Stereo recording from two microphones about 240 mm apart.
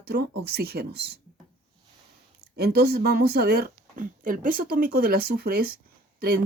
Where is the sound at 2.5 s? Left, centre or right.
Right.